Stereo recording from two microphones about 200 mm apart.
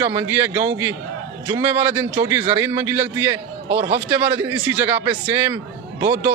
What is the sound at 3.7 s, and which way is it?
Speech, 55° right (ahead or behind).